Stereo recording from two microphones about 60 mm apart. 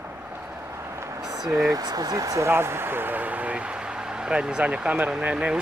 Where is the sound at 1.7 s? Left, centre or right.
Right.